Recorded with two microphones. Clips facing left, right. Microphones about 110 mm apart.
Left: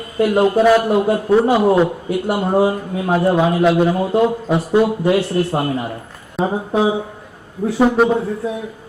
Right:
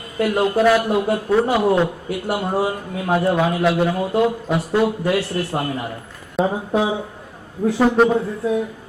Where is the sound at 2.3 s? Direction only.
20° left (ahead or behind).